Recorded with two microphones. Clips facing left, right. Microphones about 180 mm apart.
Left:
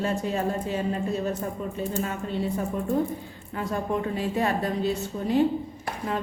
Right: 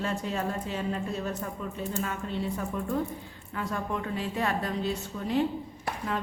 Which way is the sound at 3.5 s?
30° left (ahead or behind).